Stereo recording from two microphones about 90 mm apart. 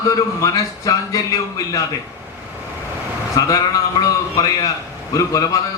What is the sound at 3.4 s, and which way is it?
A man's voice, 40° left (ahead or behind).